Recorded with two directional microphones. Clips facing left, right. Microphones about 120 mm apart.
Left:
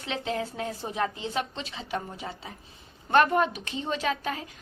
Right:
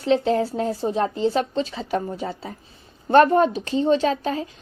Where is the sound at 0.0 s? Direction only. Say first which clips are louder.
Right 12 dB; 35° right (ahead or behind).